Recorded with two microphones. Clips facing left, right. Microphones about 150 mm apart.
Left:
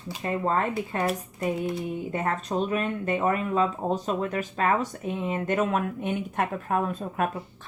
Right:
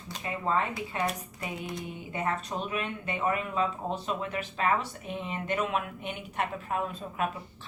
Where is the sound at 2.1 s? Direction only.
45° left (ahead or behind).